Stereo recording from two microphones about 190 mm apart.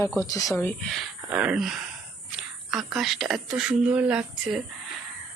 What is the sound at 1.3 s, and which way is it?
Speech, 5° right (ahead or behind).